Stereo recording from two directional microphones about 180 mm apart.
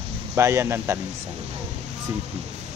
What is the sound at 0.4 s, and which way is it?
Speech, 15° right (ahead or behind).